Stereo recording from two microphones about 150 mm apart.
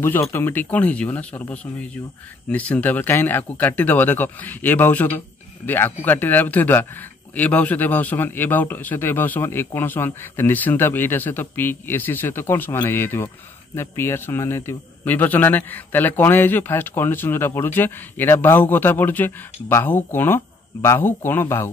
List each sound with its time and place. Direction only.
0.0 s speech: 15° left (ahead or behind)